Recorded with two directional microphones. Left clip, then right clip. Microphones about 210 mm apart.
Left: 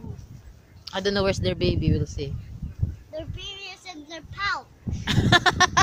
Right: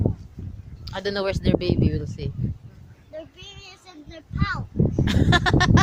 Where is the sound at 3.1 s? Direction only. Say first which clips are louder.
Left 3 dB; 35° left (ahead or behind).